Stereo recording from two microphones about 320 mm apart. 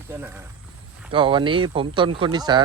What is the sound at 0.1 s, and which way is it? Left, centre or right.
Speech, centre.